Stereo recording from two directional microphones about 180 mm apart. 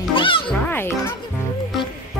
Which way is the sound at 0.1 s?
30° left (ahead or behind).